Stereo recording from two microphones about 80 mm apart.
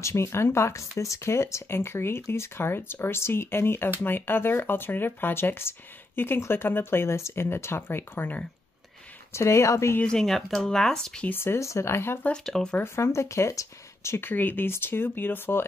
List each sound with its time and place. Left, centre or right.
0.0 s speech: left
9.3 s speech: left
9.9 s speech: centre
11.2 s speech: left
12.4 s speech: centre
12.7 s speech: left